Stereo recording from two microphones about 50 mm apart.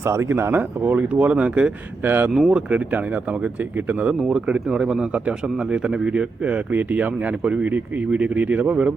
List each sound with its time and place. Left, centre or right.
0.0 s speech: right
0.3 s speech: right
0.8 s speech: right
2.0 s speech: right
2.3 s speech: centre
4.1 s speech: centre